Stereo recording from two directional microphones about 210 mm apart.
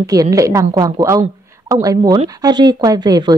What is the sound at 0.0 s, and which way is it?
Speech, 15° right (ahead or behind).